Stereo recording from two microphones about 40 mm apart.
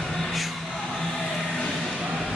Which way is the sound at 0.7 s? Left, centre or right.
Centre.